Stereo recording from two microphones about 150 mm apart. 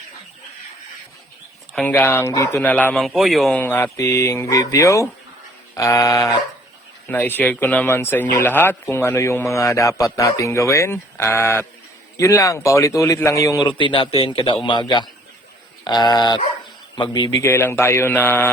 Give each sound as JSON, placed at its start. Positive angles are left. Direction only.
{"t": 1.7, "sound": "a man's voice", "side_deg": 10}